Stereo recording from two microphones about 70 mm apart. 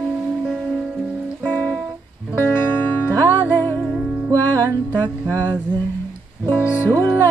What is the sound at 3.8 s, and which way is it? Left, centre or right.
Music, centre.